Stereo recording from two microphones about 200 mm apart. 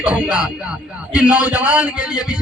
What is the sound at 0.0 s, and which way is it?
A man's voice, 5° right (ahead or behind).